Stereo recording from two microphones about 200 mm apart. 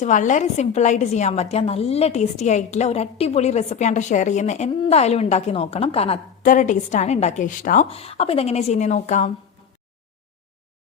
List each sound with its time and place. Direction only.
0.0 s a woman's voice: 40° left (ahead or behind)
6.4 s a woman's voice: 40° left (ahead or behind)
7.9 s a woman's voice: 30° left (ahead or behind)